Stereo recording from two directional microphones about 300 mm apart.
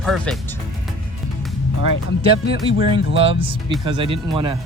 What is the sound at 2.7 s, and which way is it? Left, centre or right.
Speech, centre.